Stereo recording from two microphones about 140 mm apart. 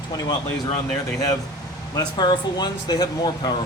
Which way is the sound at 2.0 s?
30° left (ahead or behind).